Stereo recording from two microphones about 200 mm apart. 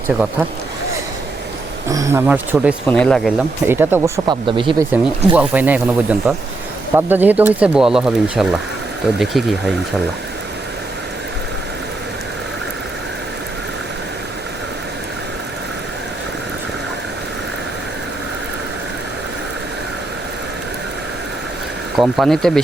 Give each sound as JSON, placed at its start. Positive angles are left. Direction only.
{"t": 0.1, "sound": "speech", "side_deg": -5}
{"t": 1.9, "sound": "speech", "side_deg": -15}
{"t": 2.8, "sound": "speech", "side_deg": 5}
{"t": 3.7, "sound": "speech", "side_deg": -10}
{"t": 4.3, "sound": "speech", "side_deg": -25}
{"t": 4.9, "sound": "speech", "side_deg": -10}
{"t": 21.9, "sound": "speech", "side_deg": 0}